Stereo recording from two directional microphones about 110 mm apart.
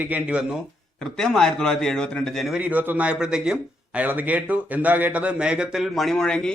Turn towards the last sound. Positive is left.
turn(degrees=5)  # may be behind; listen again after turning